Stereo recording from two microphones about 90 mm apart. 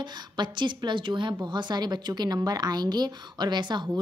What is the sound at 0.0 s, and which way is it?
A woman's voice, 60° right (ahead or behind).